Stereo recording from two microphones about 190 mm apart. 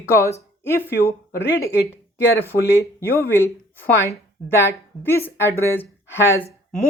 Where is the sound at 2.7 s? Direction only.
15° left (ahead or behind).